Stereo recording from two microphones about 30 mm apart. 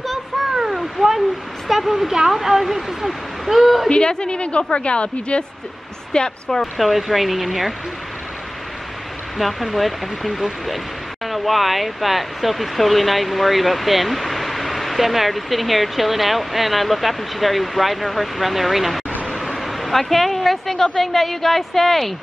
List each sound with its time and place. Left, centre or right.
0.7 s cat: centre
1.7 s speech: centre
3.9 s speech: left
6.8 s speech: centre
9.4 s speech: centre
19.3 s a sound: centre
21.0 s a woman's voice: centre